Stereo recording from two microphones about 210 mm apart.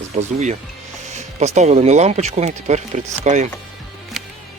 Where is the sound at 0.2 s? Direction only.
35° right (ahead or behind).